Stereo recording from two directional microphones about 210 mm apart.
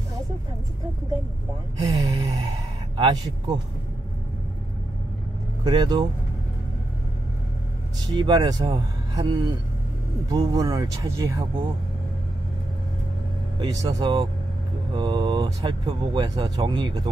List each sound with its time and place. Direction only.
1.8 s gasp: 15° right (ahead or behind)
3.0 s speech: 20° right (ahead or behind)
5.6 s speech: 20° right (ahead or behind)
8.1 s speech: 20° right (ahead or behind)
13.6 s speech: 15° right (ahead or behind)